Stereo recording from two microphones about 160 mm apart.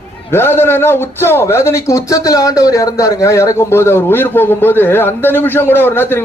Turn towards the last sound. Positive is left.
turn(degrees=15)  # may be behind; listen again after turning